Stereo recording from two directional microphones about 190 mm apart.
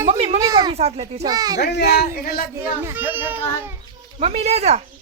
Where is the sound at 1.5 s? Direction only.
60° left (ahead or behind).